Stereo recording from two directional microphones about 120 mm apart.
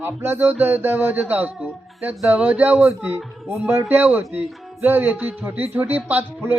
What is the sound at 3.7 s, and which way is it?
Speech, 20° right (ahead or behind).